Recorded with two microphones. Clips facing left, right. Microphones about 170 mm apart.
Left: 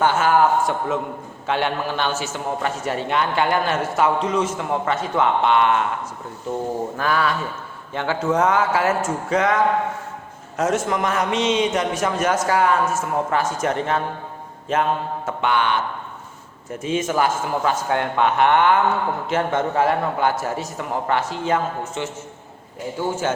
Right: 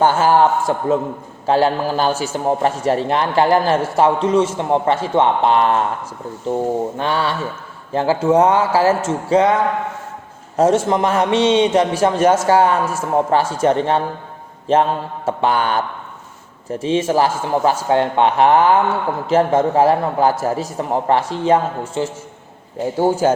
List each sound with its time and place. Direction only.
0.0 s a man's voice: 35° right (ahead or behind)
6.9 s a sound: 25° right (ahead or behind)
7.9 s a man's voice: 35° right (ahead or behind)
10.6 s a man's voice: 30° right (ahead or behind)
15.3 s a man's voice: 35° right (ahead or behind)